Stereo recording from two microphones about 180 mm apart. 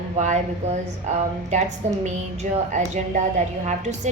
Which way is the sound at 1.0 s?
40° right (ahead or behind).